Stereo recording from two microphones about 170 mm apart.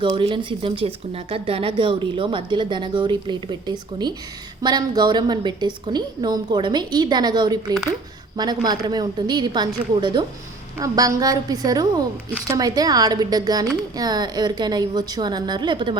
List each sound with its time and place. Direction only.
0.2 s a woman's voice: 30° right (ahead or behind)